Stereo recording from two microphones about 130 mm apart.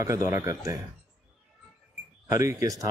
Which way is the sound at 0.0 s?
25° right (ahead or behind).